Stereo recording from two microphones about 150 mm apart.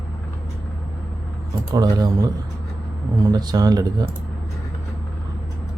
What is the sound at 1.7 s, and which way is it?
Speech, 25° right (ahead or behind).